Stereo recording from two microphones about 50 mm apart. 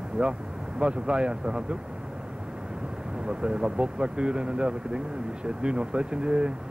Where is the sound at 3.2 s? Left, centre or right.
Centre.